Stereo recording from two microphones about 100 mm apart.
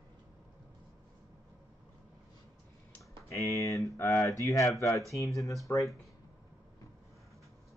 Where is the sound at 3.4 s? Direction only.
35° left (ahead or behind).